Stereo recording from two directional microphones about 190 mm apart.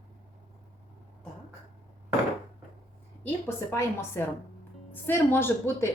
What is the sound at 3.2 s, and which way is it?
A woman's voice, 10° left (ahead or behind).